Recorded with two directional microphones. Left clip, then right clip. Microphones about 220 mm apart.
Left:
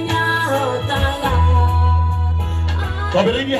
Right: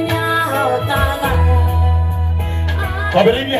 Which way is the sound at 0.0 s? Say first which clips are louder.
Right 1 dB; 10° right (ahead or behind).